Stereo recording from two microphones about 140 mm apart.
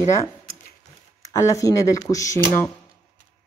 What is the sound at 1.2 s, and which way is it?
A woman's voice, 20° left (ahead or behind).